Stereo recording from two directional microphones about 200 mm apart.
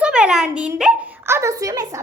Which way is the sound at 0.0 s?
5° right (ahead or behind).